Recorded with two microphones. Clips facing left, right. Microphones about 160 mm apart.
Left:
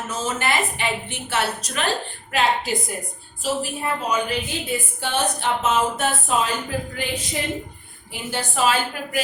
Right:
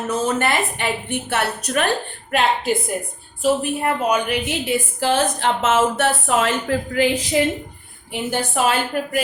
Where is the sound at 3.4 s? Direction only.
60° right (ahead or behind); by 7.1 s 90° right.